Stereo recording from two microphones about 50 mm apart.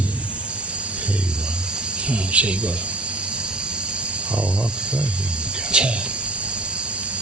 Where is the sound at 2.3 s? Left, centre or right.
Right.